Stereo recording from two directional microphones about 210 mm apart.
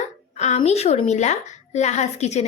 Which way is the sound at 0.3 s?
30° left (ahead or behind).